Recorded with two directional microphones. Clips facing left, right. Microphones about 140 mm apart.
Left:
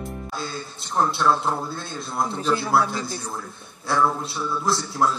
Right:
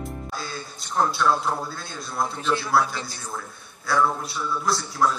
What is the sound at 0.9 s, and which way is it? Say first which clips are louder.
A man's voice: left 1 dB; 25° left (ahead or behind).